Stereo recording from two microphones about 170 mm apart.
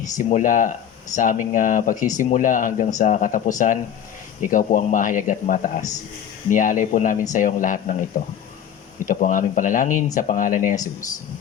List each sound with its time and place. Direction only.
0.2 s speech: 50° left (ahead or behind)